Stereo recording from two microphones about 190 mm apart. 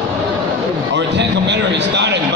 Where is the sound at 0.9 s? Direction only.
65° right (ahead or behind).